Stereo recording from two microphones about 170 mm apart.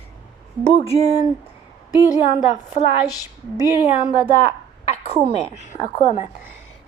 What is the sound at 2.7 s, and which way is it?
Speech, 45° left (ahead or behind).